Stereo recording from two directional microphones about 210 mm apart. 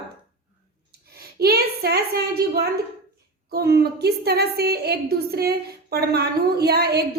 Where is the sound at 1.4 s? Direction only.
50° right (ahead or behind).